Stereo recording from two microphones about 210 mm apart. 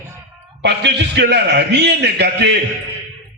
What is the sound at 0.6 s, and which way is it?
A man's voice, 55° right (ahead or behind).